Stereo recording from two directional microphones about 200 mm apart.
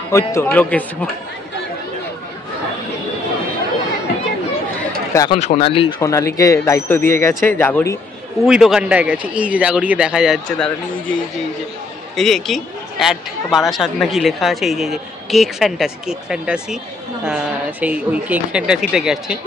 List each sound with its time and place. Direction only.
0.1 s speech: 15° left (ahead or behind)
5.3 s speech: 30° left (ahead or behind)
5.9 s speech: 15° left (ahead or behind)
8.5 s a woman's voice: 5° right (ahead or behind)
12.2 s a woman's voice: centre (ahead or behind)